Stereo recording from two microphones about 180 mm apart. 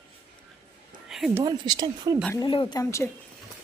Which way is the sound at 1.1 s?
5° right (ahead or behind).